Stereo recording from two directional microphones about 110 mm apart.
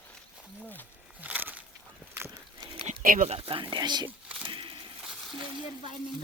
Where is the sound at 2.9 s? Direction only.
90° right.